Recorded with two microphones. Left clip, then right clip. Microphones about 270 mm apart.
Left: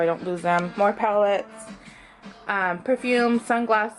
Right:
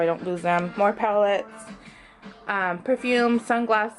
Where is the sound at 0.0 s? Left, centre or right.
Centre.